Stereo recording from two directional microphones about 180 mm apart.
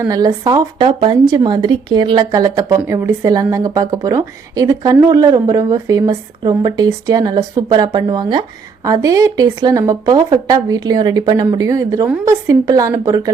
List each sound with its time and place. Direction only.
0.0 s speech: 20° right (ahead or behind)